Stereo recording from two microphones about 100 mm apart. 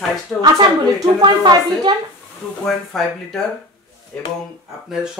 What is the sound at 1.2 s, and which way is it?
Speech, 50° right (ahead or behind).